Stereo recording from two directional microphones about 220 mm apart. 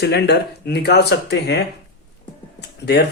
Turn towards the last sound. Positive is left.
turn(degrees=45)  # may be behind; listen again after turning